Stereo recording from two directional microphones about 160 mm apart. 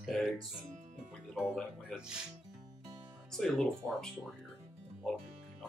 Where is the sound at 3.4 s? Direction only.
Centre (ahead or behind).